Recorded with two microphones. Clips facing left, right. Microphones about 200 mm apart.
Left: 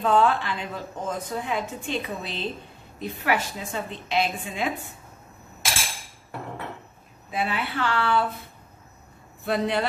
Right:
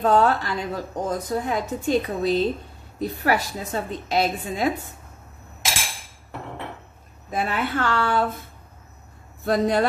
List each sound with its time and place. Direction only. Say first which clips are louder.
0.0 s a woman's voice: right 2 dB; 40° right (ahead or behind)
7.2 s a woman's voice: right 3 dB; 45° right (ahead or behind)
9.4 s a woman's voice: right 4 dB; 45° right (ahead or behind)